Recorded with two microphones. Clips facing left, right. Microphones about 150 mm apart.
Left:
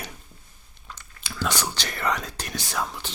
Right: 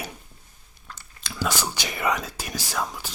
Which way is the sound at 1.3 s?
5° right (ahead or behind).